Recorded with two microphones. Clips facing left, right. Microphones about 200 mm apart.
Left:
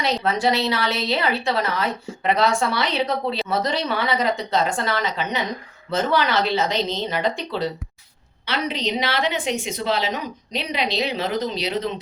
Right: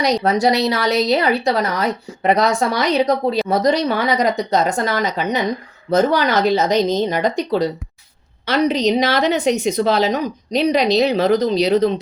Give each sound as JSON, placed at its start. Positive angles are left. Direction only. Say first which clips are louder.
{"t": 0.2, "sound": "a woman's voice", "louder": "right 5 dB", "side_deg": -40}